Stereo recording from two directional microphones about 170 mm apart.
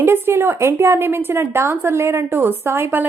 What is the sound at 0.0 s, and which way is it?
A woman's voice, 15° right (ahead or behind).